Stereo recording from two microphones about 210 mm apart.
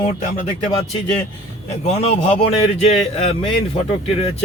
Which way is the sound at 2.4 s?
30° left (ahead or behind).